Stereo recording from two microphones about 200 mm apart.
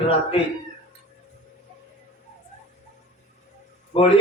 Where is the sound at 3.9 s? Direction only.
30° left (ahead or behind).